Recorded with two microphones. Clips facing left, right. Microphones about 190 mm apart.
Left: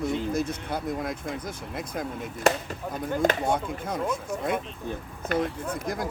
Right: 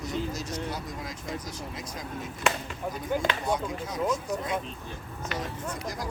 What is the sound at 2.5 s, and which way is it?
Speech, 40° left (ahead or behind).